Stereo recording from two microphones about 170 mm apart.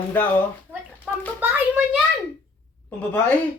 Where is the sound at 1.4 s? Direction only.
10° right (ahead or behind).